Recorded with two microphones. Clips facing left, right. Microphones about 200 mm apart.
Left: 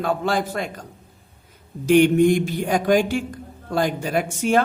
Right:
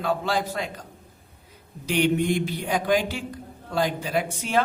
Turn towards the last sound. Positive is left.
turn(degrees=50)  # may be behind; listen again after turning